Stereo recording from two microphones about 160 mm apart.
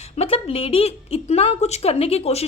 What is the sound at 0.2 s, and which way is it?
A woman's voice, 40° left (ahead or behind).